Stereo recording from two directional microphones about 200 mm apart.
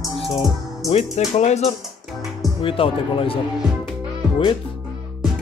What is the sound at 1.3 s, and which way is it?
Speech, 35° left (ahead or behind).